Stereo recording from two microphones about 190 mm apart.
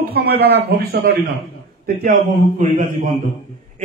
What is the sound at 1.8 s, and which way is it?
Speech, 45° right (ahead or behind).